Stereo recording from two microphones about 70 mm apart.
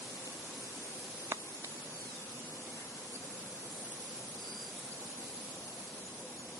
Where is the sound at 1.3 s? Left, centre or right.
Right.